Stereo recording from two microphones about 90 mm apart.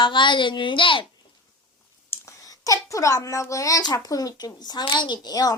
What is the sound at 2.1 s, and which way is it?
A child's voice, 35° left (ahead or behind).